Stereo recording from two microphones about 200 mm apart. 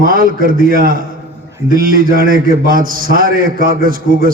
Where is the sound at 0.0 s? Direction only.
45° right (ahead or behind).